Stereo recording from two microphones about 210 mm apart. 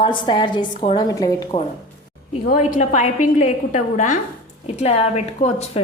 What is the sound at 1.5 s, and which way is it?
Speech, 30° left (ahead or behind).